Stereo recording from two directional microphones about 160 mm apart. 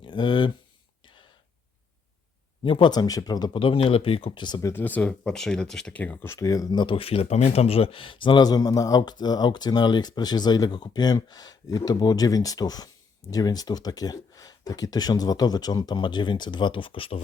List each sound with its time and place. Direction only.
0.0 s speech: 30° left (ahead or behind)
2.6 s speech: 30° left (ahead or behind)
4.7 s speech: 10° left (ahead or behind); by 17.2 s 35° left (ahead or behind)